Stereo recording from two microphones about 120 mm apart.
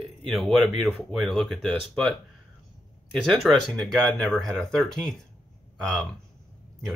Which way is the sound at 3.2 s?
Centre (ahead or behind).